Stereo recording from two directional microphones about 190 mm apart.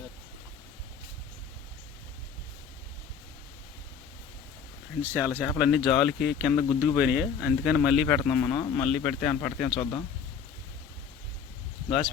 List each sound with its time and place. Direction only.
5.0 s speech: 10° right (ahead or behind); by 9.6 s 5° left (ahead or behind)
9.7 s speech: 20° left (ahead or behind)